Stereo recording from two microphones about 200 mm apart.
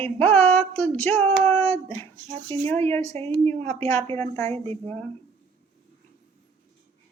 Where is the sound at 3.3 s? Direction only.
10° left (ahead or behind).